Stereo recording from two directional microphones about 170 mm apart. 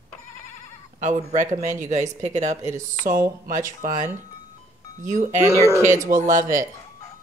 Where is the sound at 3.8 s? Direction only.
50° right (ahead or behind).